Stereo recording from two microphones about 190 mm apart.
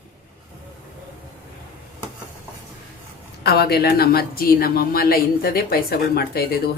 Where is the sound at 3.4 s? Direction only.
55° left (ahead or behind).